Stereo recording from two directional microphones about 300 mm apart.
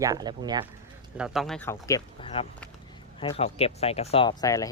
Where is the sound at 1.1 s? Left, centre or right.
Centre.